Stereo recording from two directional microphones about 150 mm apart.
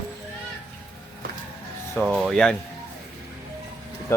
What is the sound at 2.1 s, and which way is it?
Speech, centre (ahead or behind).